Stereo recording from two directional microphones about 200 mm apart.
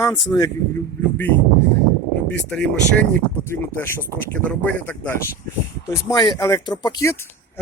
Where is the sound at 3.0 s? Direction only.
10° left (ahead or behind).